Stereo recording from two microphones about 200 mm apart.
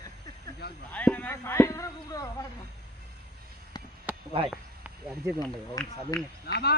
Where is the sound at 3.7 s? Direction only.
20° left (ahead or behind).